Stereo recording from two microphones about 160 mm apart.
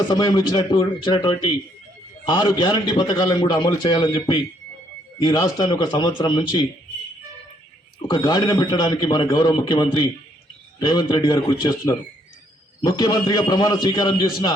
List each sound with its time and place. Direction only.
0.1 s a man's voice: 25° left (ahead or behind)
8.0 s a man's voice: 25° left (ahead or behind)